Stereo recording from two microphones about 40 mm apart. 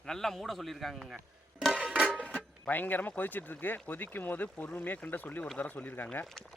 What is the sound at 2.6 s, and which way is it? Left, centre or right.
Speech, left.